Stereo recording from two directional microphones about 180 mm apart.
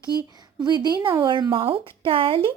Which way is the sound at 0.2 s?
20° right (ahead or behind).